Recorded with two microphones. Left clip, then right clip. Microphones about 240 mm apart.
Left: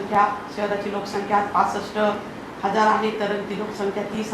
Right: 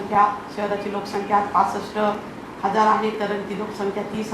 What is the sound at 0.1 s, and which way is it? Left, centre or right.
A woman's voice, centre.